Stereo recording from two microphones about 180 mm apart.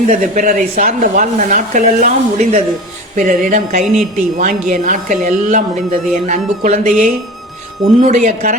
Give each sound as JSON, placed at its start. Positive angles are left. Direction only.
{"t": 0.1, "sound": "speech", "side_deg": -45}